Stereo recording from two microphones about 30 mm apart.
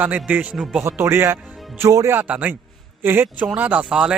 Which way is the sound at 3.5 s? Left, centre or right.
Right.